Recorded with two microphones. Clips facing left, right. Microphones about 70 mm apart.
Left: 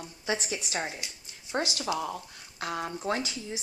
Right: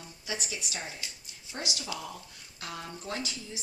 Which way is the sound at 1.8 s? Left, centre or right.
Left.